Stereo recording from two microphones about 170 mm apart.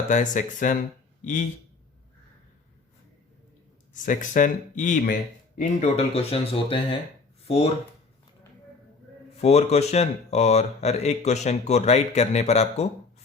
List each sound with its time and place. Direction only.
0.1 s speech: 50° left (ahead or behind)
4.0 s speech: 50° left (ahead or behind)
9.4 s speech: 40° left (ahead or behind)